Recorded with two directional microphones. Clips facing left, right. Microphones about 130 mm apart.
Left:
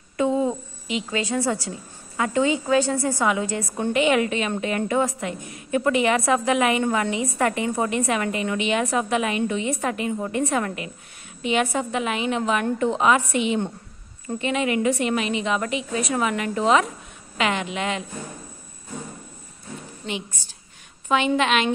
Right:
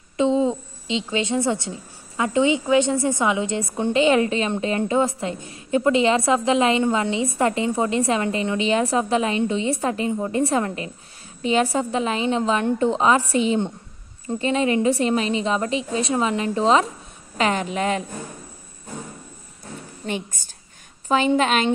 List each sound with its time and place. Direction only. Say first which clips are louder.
0.2 s a woman's voice: right 2 dB; 20° right (ahead or behind); by 18.0 s 40° right (ahead or behind)
20.1 s a woman's voice: right 3 dB; 50° right (ahead or behind)
21.1 s a woman's voice: right 2 dB; 40° right (ahead or behind)